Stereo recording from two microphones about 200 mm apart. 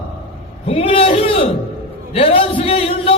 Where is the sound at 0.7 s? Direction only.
30° left (ahead or behind).